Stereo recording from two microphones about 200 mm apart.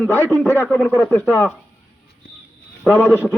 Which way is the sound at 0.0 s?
15° left (ahead or behind).